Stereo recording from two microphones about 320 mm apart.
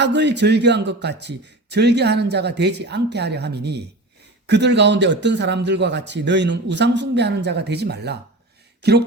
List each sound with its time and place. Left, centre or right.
0.0 s speech: right